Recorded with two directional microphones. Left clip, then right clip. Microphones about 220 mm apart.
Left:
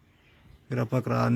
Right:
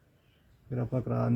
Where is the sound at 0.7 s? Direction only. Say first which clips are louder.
Left 5 dB; 15° left (ahead or behind).